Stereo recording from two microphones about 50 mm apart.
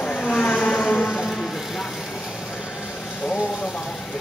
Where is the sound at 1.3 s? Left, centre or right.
Centre.